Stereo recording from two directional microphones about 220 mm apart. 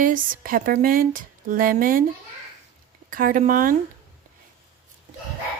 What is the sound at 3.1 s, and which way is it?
Speech, 40° right (ahead or behind).